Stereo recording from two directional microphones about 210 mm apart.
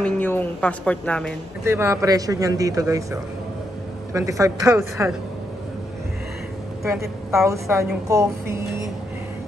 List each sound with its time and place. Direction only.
0.0 s a woman's voice: 10° left (ahead or behind)
1.6 s a man's voice: 15° right (ahead or behind)
7.2 s a man's voice: 15° right (ahead or behind)